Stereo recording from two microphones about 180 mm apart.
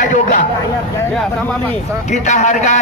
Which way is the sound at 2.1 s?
40° left (ahead or behind).